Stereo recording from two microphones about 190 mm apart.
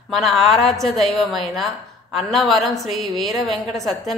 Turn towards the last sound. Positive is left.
turn(degrees=0)  # may be behind; listen again after turning